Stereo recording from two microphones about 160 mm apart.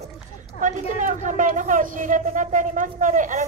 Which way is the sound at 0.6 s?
50° right (ahead or behind).